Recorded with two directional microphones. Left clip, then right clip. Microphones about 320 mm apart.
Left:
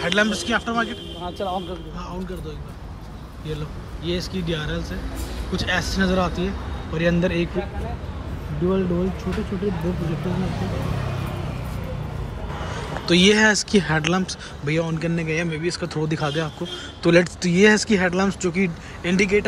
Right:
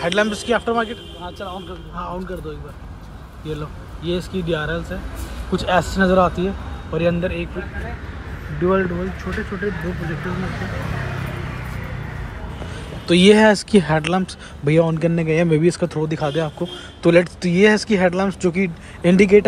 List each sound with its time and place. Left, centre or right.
0.0 s speech: centre
1.2 s speech: left
3.4 s speech: centre
12.7 s speech: centre